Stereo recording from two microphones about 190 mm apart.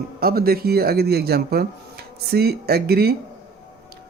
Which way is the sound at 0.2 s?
55° right (ahead or behind).